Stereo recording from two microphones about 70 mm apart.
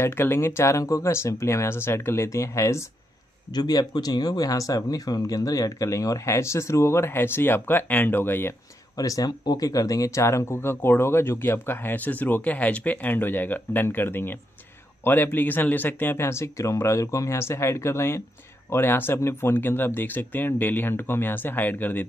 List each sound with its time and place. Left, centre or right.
0.0 s speech: left
3.5 s speech: left
8.9 s speech: left